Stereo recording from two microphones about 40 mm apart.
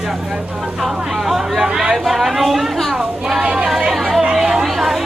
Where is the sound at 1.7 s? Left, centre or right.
Centre.